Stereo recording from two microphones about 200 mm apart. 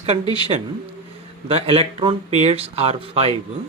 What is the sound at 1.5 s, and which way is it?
Speech, 30° right (ahead or behind).